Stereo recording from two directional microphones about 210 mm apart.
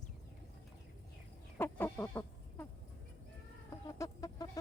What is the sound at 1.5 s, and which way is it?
Chicken, 10° left (ahead or behind).